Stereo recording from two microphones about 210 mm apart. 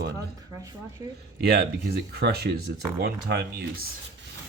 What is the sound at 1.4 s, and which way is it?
Speech, 50° right (ahead or behind).